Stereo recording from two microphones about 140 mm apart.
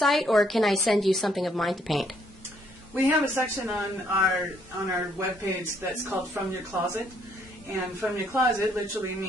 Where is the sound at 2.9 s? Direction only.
15° right (ahead or behind).